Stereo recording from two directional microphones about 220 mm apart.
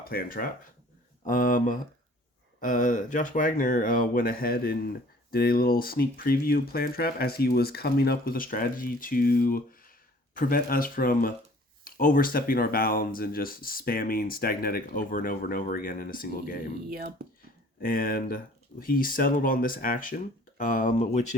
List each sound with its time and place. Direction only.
0.0 s speech: 40° left (ahead or behind)
17.2 s speech: 45° right (ahead or behind)
17.7 s speech: 40° left (ahead or behind)